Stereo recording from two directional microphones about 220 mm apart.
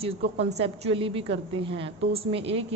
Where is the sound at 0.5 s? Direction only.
25° right (ahead or behind).